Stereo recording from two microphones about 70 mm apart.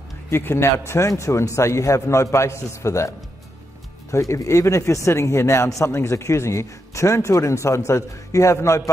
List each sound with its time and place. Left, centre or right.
0.3 s speech: left